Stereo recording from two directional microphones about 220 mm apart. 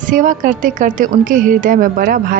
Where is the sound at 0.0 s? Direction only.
35° right (ahead or behind).